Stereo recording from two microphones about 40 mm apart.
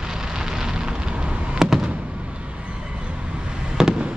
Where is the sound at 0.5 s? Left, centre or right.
Centre.